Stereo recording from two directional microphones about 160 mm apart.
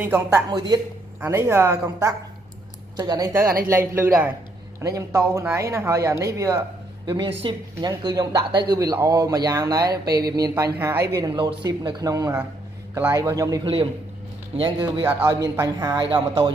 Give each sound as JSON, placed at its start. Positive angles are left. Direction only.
{"t": 0.0, "sound": "speech", "side_deg": -15}
{"t": 0.5, "sound": "speech", "side_deg": -25}
{"t": 1.2, "sound": "speech", "side_deg": -15}
{"t": 14.6, "sound": "speech", "side_deg": -30}
{"t": 15.0, "sound": "speech", "side_deg": -10}
{"t": 15.4, "sound": "speech", "side_deg": -20}